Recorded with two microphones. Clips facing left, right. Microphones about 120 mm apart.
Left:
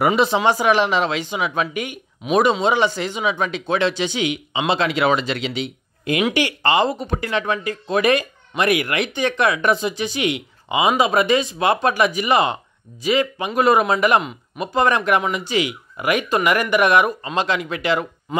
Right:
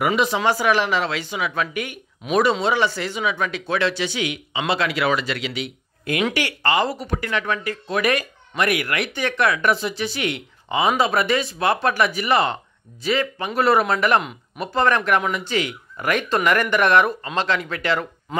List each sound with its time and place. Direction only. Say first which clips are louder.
0.0 s speech: left 3 dB; 30° left (ahead or behind)
0.4 s speech: left 3 dB; 20° left (ahead or behind)
2.2 s speech: left 3 dB; 5° left (ahead or behind)
2.6 s speech: left 2 dB; 20° left (ahead or behind)